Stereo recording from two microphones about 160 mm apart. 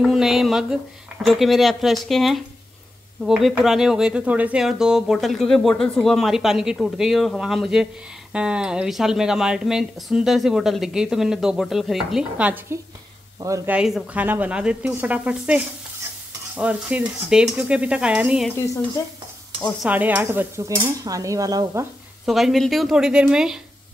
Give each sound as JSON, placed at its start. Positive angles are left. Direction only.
{"t": 0.0, "sound": "speech", "side_deg": 0}
{"t": 13.7, "sound": "dishes", "side_deg": -5}
{"t": 19.8, "sound": "dishes", "side_deg": -10}
{"t": 22.2, "sound": "speech", "side_deg": 0}